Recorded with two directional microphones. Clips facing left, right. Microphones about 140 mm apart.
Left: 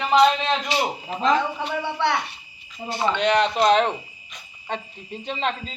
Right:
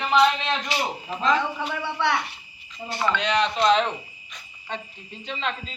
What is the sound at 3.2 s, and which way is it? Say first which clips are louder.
Speech: left 5 dB; 50° left (ahead or behind).